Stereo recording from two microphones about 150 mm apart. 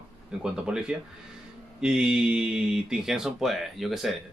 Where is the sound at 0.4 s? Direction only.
5° right (ahead or behind).